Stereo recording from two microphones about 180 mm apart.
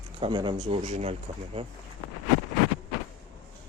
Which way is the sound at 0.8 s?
40° right (ahead or behind).